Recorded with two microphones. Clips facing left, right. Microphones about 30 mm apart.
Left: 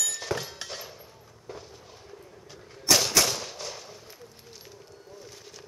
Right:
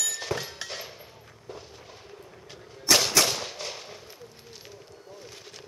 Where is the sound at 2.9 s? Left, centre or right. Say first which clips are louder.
Right 1 dB; centre.